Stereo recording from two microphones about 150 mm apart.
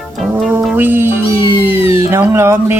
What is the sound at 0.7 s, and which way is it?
Speech, 15° right (ahead or behind).